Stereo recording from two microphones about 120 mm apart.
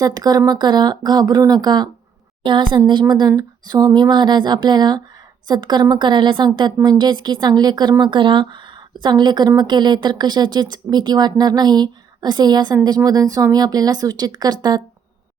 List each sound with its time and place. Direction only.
0.0 s speech: 35° right (ahead or behind)